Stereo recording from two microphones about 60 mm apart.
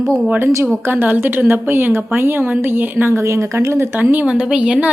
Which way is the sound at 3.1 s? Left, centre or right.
Right.